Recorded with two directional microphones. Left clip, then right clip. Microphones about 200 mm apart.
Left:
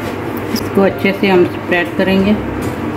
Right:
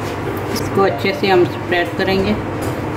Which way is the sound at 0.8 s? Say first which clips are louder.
Left 3 dB; 20° left (ahead or behind).